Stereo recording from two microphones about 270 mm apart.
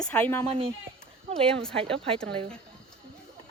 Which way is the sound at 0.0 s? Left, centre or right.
Centre.